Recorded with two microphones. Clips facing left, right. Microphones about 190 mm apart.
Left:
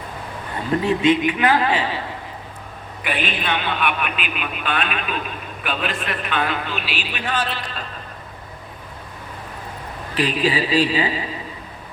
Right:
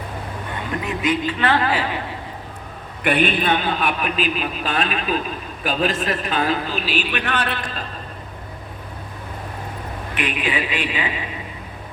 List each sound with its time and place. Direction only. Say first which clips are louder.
0.7 s speech: left 6 dB; 30° left (ahead or behind); by 1.6 s 10° left (ahead or behind)
3.0 s a man's voice: right 6 dB; 50° right (ahead or behind)
10.2 s a man's voice: left 4 dB; 35° left (ahead or behind)